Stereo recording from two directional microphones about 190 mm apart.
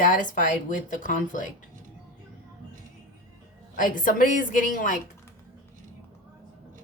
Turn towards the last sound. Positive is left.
turn(degrees=45)  # may be behind; listen again after turning